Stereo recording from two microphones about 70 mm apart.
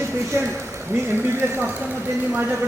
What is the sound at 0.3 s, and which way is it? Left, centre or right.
Speech, right.